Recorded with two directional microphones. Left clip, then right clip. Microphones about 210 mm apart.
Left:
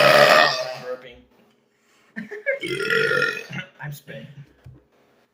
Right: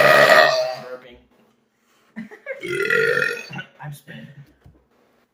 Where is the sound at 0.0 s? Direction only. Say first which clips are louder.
Right 2 dB; 10° right (ahead or behind).